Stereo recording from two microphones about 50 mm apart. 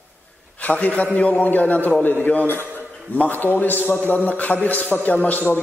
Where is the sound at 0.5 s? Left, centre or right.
Left.